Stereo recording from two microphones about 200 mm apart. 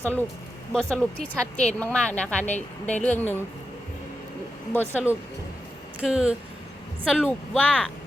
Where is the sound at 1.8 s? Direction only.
5° left (ahead or behind).